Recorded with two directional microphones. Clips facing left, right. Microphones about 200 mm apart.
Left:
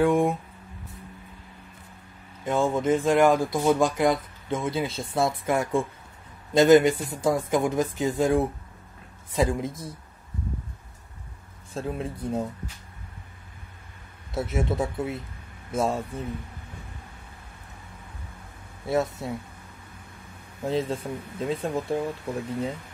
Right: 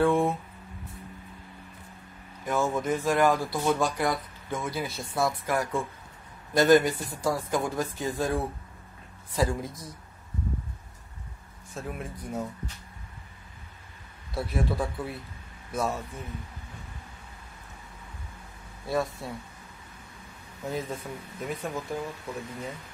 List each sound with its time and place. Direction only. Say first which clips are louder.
0.0 s speech: left 2 dB; 15° left (ahead or behind)
2.4 s speech: left 4 dB; 25° left (ahead or behind)
11.7 s speech: left 6 dB; 30° left (ahead or behind)
14.3 s speech: left 3 dB; 20° left (ahead or behind)
18.9 s speech: left 4 dB; 20° left (ahead or behind)
20.6 s speech: left 6 dB; 30° left (ahead or behind)